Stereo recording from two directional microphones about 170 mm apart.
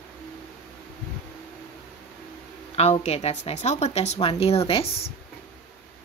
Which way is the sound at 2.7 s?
40° left (ahead or behind).